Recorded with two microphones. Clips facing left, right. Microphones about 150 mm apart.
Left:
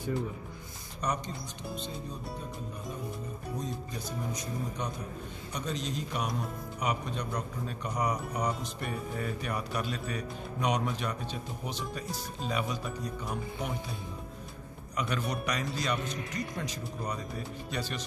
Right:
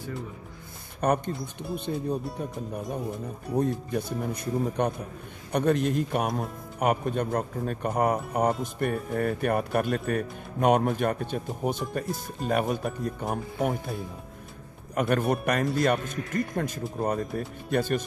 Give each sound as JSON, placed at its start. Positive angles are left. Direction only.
{"t": 1.0, "sound": "speech", "side_deg": -55}
{"t": 3.5, "sound": "speech", "side_deg": -60}
{"t": 15.0, "sound": "speech", "side_deg": -55}